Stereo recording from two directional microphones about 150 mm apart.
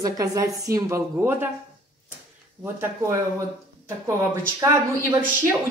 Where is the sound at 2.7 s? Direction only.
20° right (ahead or behind).